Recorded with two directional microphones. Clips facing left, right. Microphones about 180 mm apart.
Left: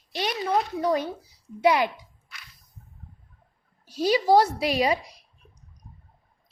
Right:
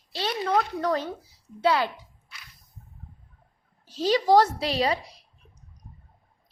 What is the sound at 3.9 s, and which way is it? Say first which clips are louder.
A child's voice: even; 10° left (ahead or behind).